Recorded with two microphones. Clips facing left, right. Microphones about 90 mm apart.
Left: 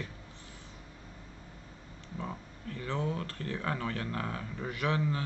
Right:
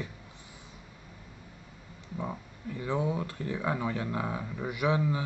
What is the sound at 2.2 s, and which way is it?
Speech, 15° right (ahead or behind).